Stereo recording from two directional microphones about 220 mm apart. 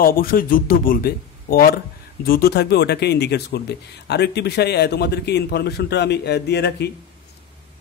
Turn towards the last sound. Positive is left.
turn(degrees=50)  # may be behind; listen again after turning